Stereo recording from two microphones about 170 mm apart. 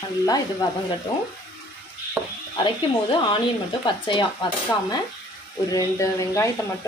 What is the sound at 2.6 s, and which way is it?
Speech, 30° left (ahead or behind).